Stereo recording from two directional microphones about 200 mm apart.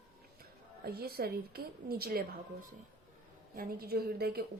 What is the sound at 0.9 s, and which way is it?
A woman's voice, 50° right (ahead or behind).